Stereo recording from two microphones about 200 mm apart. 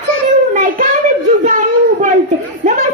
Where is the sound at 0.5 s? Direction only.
40° right (ahead or behind).